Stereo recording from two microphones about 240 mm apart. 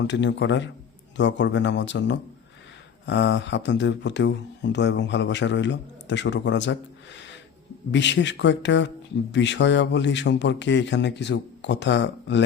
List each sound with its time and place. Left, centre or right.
0.0 s speech: left